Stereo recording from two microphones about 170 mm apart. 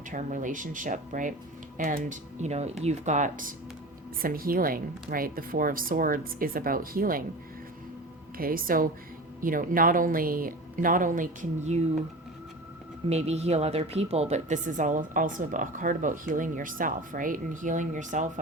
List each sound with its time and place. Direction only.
0.1 s a woman's voice: 50° right (ahead or behind)
8.4 s a woman's voice: 55° right (ahead or behind)
13.1 s a woman's voice: 40° right (ahead or behind)